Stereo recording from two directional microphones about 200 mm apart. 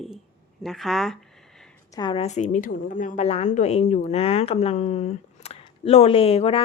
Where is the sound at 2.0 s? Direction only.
25° left (ahead or behind).